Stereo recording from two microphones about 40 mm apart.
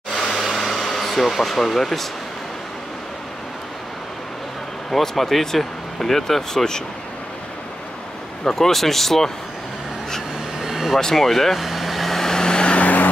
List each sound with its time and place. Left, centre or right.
0.1 s air conditioning: centre
4.9 s speech: centre
8.5 s speech: centre
10.6 s air conditioning: centre
11.1 s vehicle: centre; by 12.8 s left
12.8 s vehicle: left